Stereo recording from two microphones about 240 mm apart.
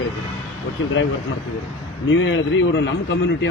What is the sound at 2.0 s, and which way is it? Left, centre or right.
Speech, left.